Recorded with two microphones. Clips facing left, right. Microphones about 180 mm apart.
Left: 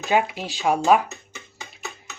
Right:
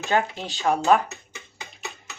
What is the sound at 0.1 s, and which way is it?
Speech, 10° left (ahead or behind).